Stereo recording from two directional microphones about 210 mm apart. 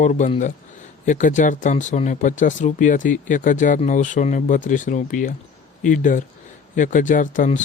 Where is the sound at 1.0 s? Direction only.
35° left (ahead or behind).